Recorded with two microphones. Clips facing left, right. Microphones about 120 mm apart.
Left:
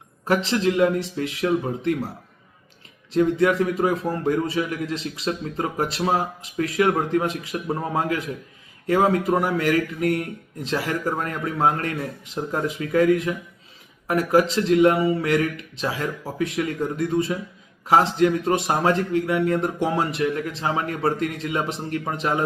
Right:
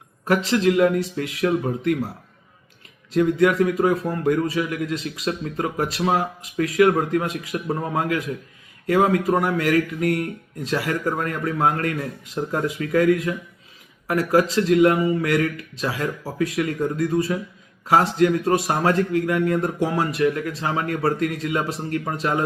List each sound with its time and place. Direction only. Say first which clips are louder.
0.4 s a man's voice: right 3 dB; 25° left (ahead or behind)
3.1 s a man's voice: right 1 dB; 25° left (ahead or behind)